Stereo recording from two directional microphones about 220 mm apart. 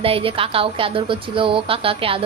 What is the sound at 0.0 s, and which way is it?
Speech, 25° right (ahead or behind).